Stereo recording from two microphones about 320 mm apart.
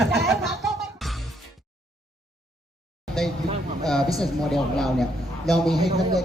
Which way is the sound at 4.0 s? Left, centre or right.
Centre.